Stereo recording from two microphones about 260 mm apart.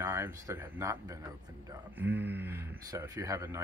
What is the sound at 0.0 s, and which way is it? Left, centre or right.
Speech, centre.